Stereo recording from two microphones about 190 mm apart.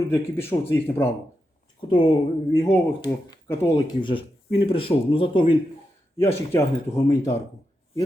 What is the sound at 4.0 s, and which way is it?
Speech, 25° left (ahead or behind).